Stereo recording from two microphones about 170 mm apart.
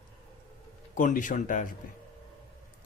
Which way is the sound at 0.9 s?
50° left (ahead or behind).